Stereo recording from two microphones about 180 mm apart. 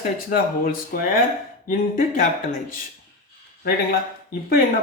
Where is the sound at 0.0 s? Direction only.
50° left (ahead or behind).